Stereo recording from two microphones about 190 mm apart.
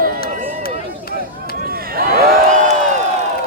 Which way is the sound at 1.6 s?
50° right (ahead or behind).